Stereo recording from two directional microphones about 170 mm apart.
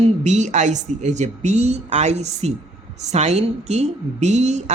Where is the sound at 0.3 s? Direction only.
45° right (ahead or behind).